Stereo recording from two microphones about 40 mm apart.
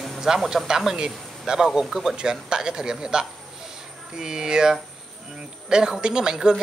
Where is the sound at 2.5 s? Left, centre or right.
Centre.